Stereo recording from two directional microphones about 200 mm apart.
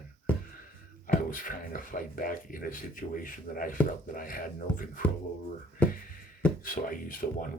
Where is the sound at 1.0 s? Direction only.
45° left (ahead or behind).